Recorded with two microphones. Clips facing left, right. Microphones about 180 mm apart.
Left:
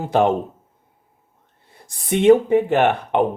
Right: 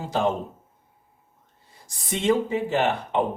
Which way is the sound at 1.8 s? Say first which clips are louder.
Left 9 dB; 60° left (ahead or behind).